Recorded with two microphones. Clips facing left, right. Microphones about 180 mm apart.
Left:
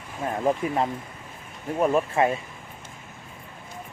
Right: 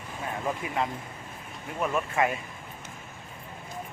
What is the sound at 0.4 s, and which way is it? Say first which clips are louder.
Speech: left 7 dB; 35° left (ahead or behind).